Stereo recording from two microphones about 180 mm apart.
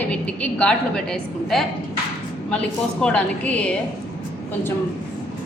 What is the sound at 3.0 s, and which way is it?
Speech, 5° left (ahead or behind).